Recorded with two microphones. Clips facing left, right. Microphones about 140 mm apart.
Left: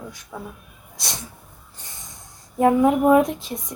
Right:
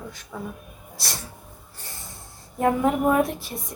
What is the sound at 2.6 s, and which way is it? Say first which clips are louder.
Speech: left 4 dB; 10° left (ahead or behind).